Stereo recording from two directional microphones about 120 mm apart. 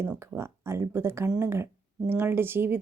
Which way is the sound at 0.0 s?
20° right (ahead or behind).